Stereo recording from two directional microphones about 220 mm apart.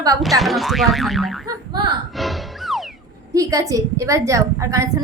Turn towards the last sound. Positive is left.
turn(degrees=-15)  # may be behind; listen again after turning